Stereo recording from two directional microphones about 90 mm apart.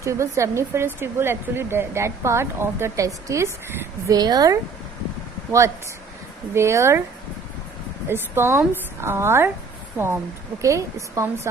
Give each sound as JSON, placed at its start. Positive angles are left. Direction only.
{"t": 0.0, "sound": "speech", "side_deg": -35}
{"t": 4.2, "sound": "a woman's voice", "side_deg": -45}
{"t": 8.0, "sound": "speech", "side_deg": -25}
{"t": 10.6, "sound": "a woman's voice", "side_deg": -35}